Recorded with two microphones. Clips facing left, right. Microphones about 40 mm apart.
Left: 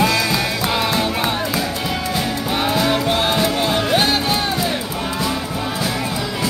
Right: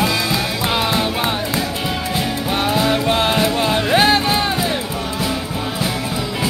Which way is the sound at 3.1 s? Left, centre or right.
Right.